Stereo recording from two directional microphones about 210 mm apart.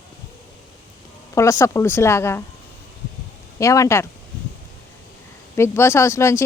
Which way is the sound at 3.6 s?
15° left (ahead or behind).